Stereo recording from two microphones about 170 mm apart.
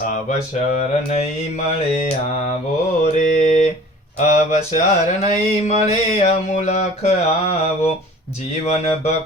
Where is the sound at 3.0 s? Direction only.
45° left (ahead or behind).